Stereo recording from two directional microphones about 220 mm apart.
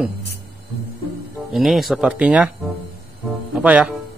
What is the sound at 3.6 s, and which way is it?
Speech, 5° right (ahead or behind).